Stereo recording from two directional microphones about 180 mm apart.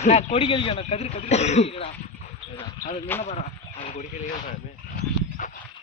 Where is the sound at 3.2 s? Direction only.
35° left (ahead or behind).